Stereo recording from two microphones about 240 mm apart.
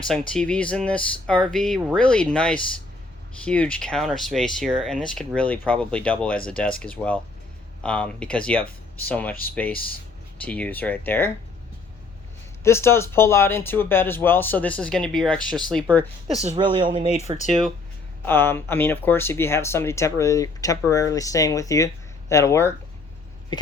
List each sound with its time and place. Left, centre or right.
0.1 s speech: centre
12.6 s speech: centre
16.4 s speech: right
18.3 s speech: centre
23.5 s a sound: centre